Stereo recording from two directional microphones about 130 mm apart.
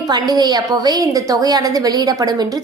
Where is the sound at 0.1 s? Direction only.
30° right (ahead or behind).